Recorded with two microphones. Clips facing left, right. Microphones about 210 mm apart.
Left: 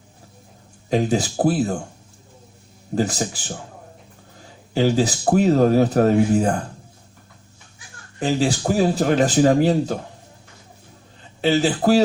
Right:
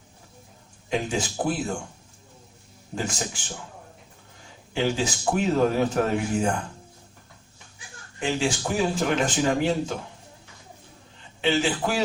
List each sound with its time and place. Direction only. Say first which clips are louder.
0.9 s speech: left 7 dB; 40° left (ahead or behind)
2.9 s speech: left 8 dB; 40° left (ahead or behind)
4.7 s speech: left 7 dB; 40° left (ahead or behind)
8.2 s speech: left 5 dB; 40° left (ahead or behind)
11.3 s speech: left 5 dB; 40° left (ahead or behind)